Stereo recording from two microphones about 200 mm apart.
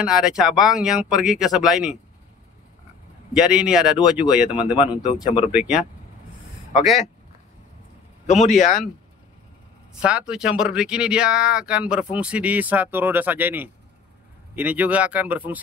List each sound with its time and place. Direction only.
0.0 s speech: 5° right (ahead or behind)
3.3 s speech: 5° right (ahead or behind)
5.0 s speech: 25° left (ahead or behind)
5.5 s speech: 5° right (ahead or behind)
8.3 s a man's voice: 35° left (ahead or behind)
10.0 s speech: 5° right (ahead or behind)